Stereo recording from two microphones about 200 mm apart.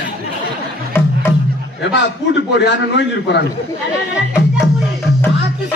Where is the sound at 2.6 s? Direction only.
60° left (ahead or behind).